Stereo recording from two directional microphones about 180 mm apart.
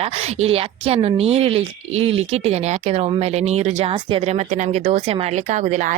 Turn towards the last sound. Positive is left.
turn(degrees=-45)  # may be behind; listen again after turning